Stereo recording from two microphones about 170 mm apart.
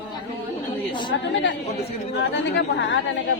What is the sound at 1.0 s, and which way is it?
Speech, 90° left.